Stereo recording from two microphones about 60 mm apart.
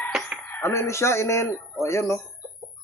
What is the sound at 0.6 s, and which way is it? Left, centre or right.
Speech, left.